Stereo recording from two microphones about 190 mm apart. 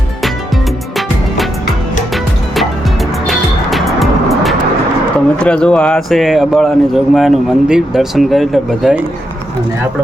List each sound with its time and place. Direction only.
3.2 s music: centre (ahead or behind)
5.4 s speech: 5° left (ahead or behind)